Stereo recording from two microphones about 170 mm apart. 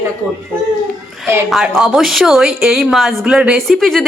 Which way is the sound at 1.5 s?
Centre (ahead or behind).